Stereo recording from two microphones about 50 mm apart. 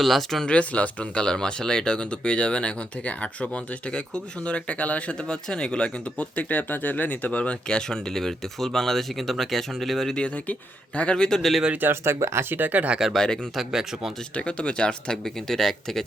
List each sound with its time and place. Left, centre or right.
0.0 s speech: centre
0.4 s speech: left
5.1 s speech: centre
10.2 s speech: left
11.1 s speech: centre
11.9 s speech: right
13.1 s speech: centre
13.6 s speech: centre
14.3 s speech: left